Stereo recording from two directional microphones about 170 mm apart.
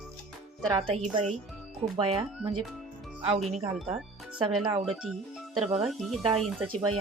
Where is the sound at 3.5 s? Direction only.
40° right (ahead or behind).